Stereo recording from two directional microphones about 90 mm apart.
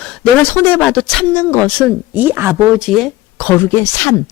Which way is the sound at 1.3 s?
20° left (ahead or behind).